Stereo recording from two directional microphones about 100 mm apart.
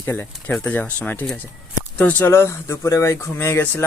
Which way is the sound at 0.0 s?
20° left (ahead or behind).